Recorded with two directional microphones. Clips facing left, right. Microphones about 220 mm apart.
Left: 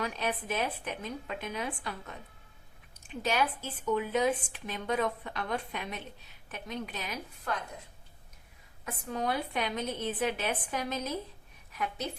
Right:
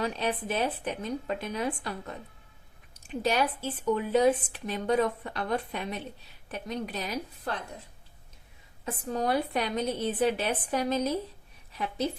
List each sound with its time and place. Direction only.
0.0 s a woman's voice: 30° right (ahead or behind)
3.2 s a woman's voice: 35° right (ahead or behind)
8.8 s a woman's voice: 35° right (ahead or behind)